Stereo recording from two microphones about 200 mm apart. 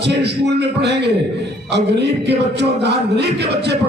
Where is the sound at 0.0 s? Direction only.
60° right (ahead or behind).